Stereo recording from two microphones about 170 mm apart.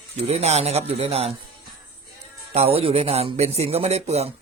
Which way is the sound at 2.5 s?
35° right (ahead or behind).